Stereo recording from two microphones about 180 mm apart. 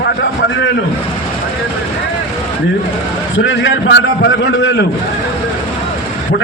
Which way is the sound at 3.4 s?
90° left.